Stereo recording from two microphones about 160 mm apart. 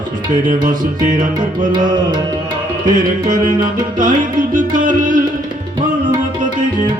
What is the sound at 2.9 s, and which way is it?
Music, 55° right (ahead or behind).